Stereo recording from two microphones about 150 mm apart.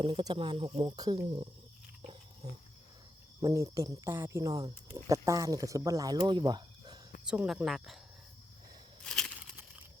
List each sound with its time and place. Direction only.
0.0 s speech: 35° right (ahead or behind)
2.0 s cricket: 40° right (ahead or behind)
3.4 s speech: 20° right (ahead or behind)
7.3 s speech: 5° right (ahead or behind)
9.0 s a sound: 5° left (ahead or behind)